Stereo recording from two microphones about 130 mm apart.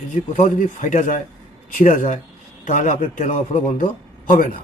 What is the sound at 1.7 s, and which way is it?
Speech, 90° left.